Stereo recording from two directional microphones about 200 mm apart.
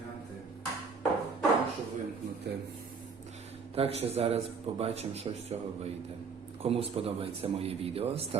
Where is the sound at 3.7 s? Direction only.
30° right (ahead or behind).